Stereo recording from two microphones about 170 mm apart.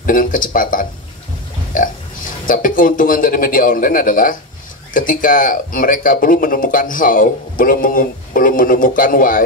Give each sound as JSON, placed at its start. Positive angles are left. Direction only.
{"t": 0.0, "sound": "speech", "side_deg": 55}
{"t": 2.4, "sound": "speech", "side_deg": 55}